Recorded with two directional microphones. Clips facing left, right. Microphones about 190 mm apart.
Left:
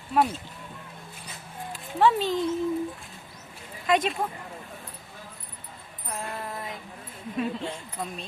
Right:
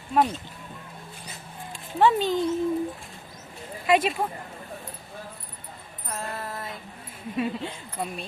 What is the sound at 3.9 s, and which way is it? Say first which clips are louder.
Speech: right 2 dB; 5° right (ahead or behind).